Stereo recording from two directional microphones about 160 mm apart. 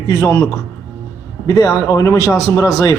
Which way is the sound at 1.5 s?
20° left (ahead or behind).